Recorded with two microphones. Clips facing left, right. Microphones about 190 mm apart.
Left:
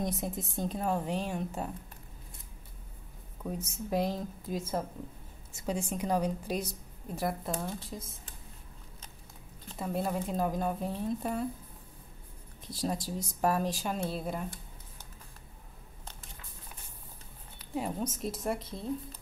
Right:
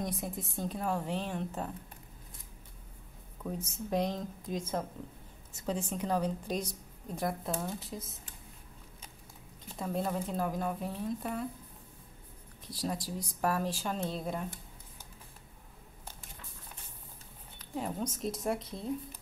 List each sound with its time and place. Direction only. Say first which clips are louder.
0.0 s a woman's voice: left 3 dB; 20° left (ahead or behind)
3.4 s a woman's voice: left 1 dB; 5° left (ahead or behind)
9.8 s a woman's voice: left 1 dB; 5° left (ahead or behind)
10.3 s a woman's voice: left 2 dB; 20° left (ahead or behind)
12.7 s a woman's voice: left 2 dB; 25° left (ahead or behind); by 14.5 s 5° left (ahead or behind)
17.6 s speech: left 2 dB; 10° left (ahead or behind)